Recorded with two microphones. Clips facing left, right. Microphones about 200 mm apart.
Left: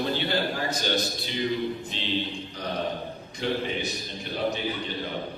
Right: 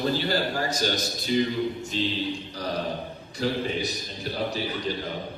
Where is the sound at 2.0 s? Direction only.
40° right (ahead or behind).